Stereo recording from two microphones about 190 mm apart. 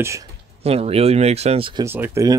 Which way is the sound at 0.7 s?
30° right (ahead or behind).